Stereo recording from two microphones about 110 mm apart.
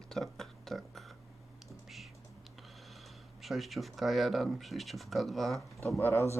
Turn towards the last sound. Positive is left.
turn(degrees=25)  # may be behind; listen again after turning